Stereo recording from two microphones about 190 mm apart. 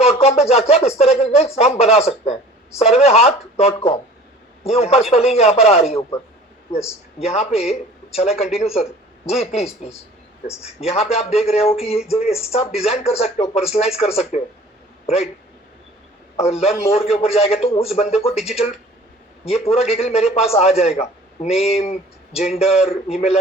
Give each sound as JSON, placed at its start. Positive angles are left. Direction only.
{"t": 0.0, "sound": "a man's voice", "side_deg": 35}
{"t": 16.4, "sound": "a man's voice", "side_deg": 35}